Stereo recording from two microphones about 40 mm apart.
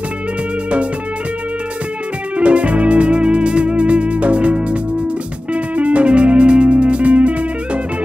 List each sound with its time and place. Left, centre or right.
2.3 s music: right